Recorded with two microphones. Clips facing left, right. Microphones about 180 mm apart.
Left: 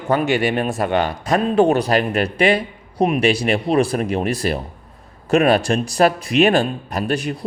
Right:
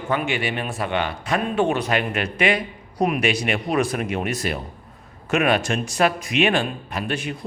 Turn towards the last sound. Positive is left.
turn(degrees=40)  # may be behind; listen again after turning